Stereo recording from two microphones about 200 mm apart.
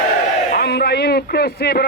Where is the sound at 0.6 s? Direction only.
55° left (ahead or behind).